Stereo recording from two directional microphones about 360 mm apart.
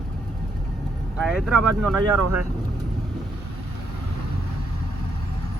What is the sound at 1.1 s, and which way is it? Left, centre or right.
Speech, centre.